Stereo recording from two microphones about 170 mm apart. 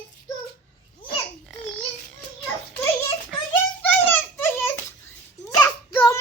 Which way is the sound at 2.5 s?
15° left (ahead or behind).